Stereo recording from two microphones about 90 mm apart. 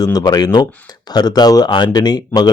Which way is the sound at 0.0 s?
45° left (ahead or behind).